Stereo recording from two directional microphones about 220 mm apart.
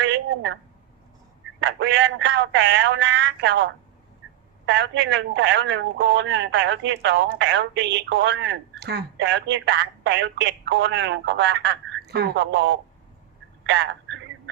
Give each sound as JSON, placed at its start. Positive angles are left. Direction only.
{"t": 0.0, "sound": "a sound", "side_deg": -55}
{"t": 1.6, "sound": "speech", "side_deg": -55}
{"t": 13.7, "sound": "telephone", "side_deg": -50}